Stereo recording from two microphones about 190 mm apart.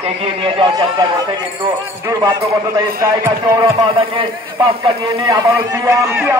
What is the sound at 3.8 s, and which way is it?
Speech, 25° right (ahead or behind).